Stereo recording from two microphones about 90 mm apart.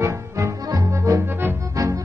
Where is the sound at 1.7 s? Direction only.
40° right (ahead or behind).